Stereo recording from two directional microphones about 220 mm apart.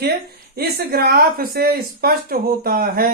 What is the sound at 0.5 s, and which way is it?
Speech, 45° right (ahead or behind).